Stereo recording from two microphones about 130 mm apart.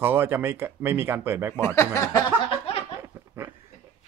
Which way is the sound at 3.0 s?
20° right (ahead or behind).